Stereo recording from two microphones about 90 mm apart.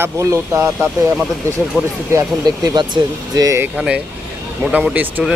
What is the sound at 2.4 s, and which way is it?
Speech, 55° right (ahead or behind).